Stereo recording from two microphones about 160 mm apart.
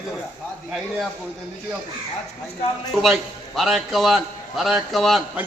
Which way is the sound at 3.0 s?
Centre (ahead or behind).